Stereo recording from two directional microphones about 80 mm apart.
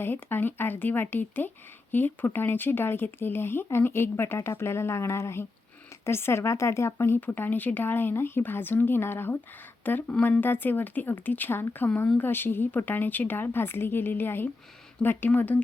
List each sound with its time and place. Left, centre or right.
0.0 s a woman's voice: left